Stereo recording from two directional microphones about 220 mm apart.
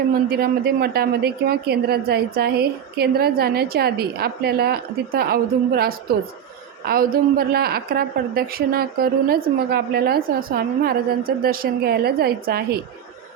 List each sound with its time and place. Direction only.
0.1 s a woman's voice: 45° right (ahead or behind)